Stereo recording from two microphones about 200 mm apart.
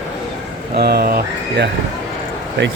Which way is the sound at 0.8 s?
55° right (ahead or behind).